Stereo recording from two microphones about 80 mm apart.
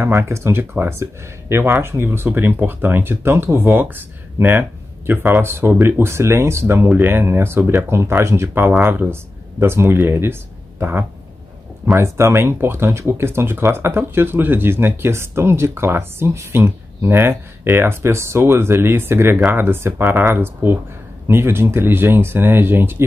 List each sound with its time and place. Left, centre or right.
0.0 s speech: right